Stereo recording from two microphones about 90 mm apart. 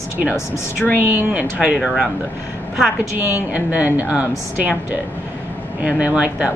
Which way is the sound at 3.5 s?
15° right (ahead or behind).